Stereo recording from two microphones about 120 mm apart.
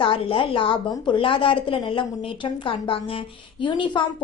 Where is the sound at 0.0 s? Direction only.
45° left (ahead or behind).